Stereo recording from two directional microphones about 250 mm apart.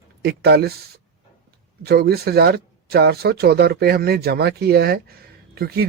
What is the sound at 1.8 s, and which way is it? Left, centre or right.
Speech, right.